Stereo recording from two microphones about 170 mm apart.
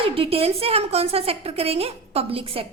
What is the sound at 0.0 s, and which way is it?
A woman's voice, 35° right (ahead or behind).